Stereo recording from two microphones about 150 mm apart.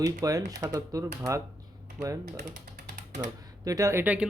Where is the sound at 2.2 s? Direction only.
90° right.